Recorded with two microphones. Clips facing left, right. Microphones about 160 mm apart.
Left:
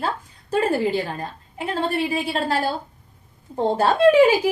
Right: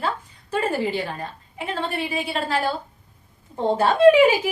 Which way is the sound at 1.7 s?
40° left (ahead or behind).